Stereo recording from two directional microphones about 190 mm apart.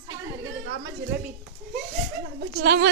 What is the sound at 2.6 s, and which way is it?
Speech, 65° right (ahead or behind).